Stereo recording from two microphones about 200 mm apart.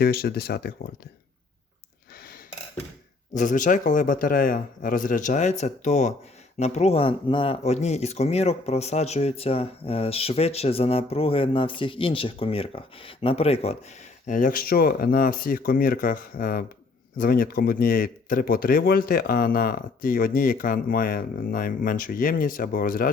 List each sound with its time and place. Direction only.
0.0 s speech: 50° left (ahead or behind)
3.3 s a man's voice: 40° left (ahead or behind)
14.3 s speech: 40° left (ahead or behind)